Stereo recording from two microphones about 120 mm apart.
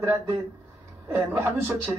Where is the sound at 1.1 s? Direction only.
20° right (ahead or behind).